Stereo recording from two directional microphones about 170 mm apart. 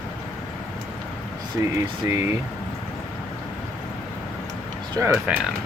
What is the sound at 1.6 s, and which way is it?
Speech, 20° right (ahead or behind).